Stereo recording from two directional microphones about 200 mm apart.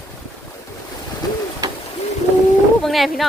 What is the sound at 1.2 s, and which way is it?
Bird, 20° left (ahead or behind).